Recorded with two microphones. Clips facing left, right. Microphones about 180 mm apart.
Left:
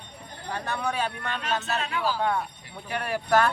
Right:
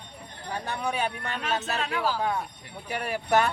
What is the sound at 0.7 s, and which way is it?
Speech, 15° right (ahead or behind).